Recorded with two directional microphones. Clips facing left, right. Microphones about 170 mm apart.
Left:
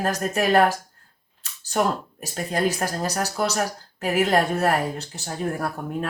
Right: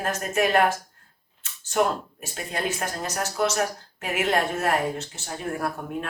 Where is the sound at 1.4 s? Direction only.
35° left (ahead or behind).